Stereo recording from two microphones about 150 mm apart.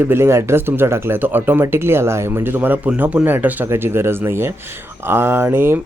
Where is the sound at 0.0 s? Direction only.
15° right (ahead or behind).